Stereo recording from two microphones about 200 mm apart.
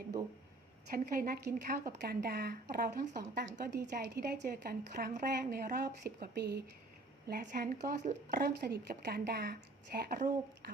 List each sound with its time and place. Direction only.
0.9 s a woman's voice: 45° right (ahead or behind)